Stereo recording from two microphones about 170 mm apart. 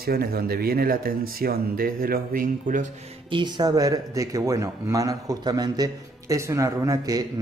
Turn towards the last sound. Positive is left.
turn(degrees=-20)  # may be behind; listen again after turning